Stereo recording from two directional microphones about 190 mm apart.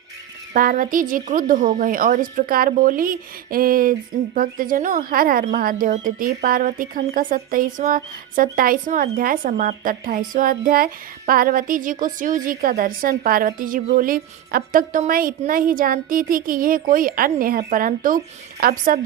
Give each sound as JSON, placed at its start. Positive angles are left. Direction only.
{"t": 0.5, "sound": "a woman's voice", "side_deg": -45}